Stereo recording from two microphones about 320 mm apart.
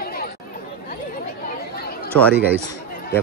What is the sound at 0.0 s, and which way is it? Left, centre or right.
Chatter, left.